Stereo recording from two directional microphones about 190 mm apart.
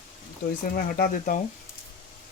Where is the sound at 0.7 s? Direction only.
50° left (ahead or behind).